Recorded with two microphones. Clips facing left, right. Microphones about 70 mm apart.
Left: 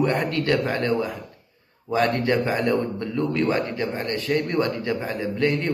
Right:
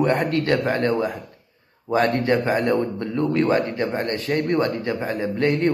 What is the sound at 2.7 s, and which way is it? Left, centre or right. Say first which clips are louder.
A man's voice: right 2 dB; right.